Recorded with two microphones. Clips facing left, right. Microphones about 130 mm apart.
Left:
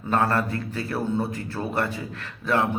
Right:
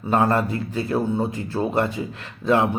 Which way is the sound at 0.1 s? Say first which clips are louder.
Right 3 dB; 20° right (ahead or behind).